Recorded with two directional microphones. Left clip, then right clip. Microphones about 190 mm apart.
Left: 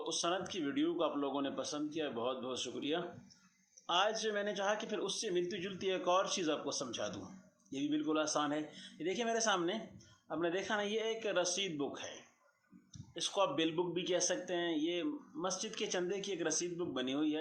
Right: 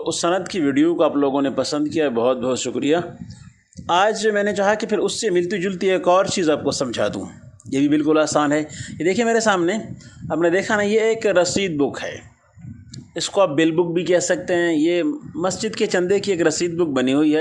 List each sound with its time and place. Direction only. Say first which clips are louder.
0.1 s speech: right 17 dB; 50° right (ahead or behind)